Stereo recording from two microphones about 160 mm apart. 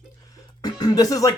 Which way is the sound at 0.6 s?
25° left (ahead or behind).